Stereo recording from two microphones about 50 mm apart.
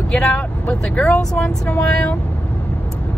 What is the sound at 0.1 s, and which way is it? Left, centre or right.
Speech, centre.